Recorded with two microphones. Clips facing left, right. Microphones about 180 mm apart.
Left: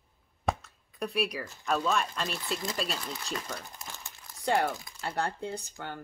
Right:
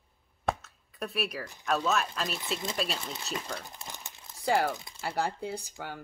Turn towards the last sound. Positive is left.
turn(degrees=-5)  # may be behind; listen again after turning